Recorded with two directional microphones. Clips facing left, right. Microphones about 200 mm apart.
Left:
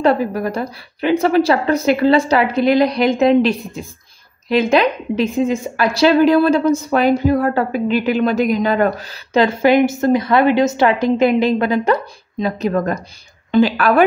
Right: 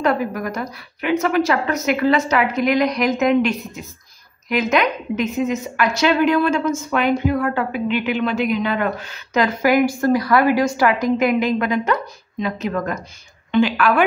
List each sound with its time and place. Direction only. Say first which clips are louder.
0.0 s a woman's voice: left 4 dB; 30° left (ahead or behind)